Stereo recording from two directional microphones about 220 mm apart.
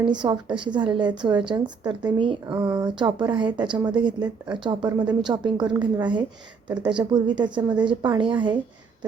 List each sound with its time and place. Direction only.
0.0 s a woman's voice: 20° right (ahead or behind)